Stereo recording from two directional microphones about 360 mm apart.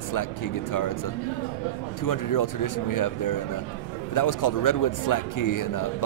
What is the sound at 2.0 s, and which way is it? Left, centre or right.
A man's voice, left.